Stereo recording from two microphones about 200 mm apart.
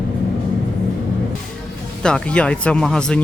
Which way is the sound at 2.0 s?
5° left (ahead or behind).